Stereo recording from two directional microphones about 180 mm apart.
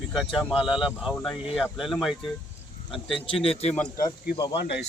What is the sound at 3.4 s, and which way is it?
Speech, 35° left (ahead or behind).